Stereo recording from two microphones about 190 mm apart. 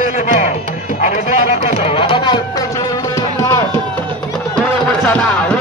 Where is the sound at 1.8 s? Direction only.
30° left (ahead or behind).